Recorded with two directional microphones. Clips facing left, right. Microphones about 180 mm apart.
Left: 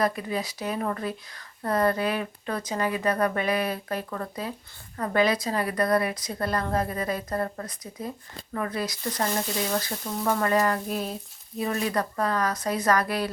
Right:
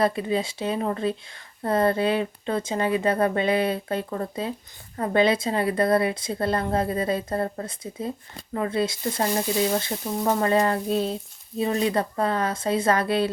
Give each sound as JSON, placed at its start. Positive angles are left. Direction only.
{"t": 0.0, "sound": "speech", "side_deg": -25}